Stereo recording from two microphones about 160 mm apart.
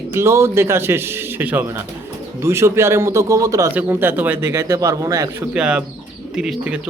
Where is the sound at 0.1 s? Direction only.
15° right (ahead or behind).